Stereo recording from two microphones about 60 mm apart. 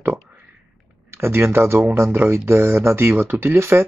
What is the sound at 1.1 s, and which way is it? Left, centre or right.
Speech, right.